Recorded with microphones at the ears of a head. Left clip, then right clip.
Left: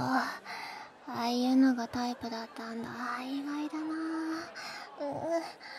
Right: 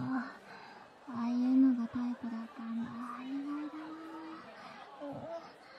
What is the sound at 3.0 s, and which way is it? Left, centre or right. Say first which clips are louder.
Music: left 9 dB; left.